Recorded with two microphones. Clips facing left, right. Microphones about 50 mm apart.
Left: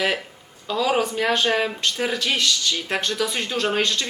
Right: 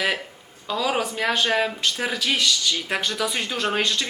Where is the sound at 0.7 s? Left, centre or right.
Centre.